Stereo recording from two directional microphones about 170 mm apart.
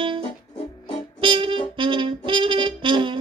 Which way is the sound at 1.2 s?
30° right (ahead or behind).